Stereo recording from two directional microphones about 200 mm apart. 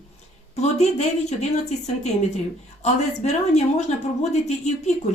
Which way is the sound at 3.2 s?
35° left (ahead or behind).